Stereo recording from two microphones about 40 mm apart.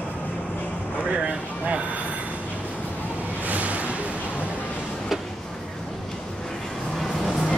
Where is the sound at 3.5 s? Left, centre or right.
Right.